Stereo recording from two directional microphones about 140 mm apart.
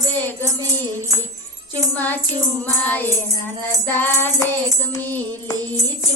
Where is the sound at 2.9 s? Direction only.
15° left (ahead or behind).